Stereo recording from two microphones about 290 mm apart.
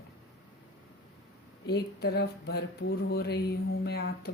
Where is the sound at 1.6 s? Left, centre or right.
Left.